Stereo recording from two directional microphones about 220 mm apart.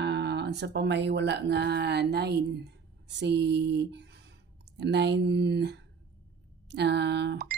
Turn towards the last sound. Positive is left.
turn(degrees=-45)  # may be behind; listen again after turning